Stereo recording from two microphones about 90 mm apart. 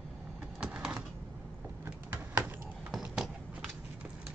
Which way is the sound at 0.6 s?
10° right (ahead or behind).